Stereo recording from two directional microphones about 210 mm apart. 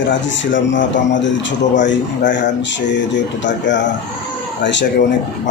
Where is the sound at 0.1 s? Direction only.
60° left (ahead or behind).